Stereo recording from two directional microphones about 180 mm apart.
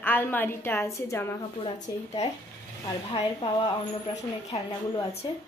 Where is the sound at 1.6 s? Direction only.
30° left (ahead or behind).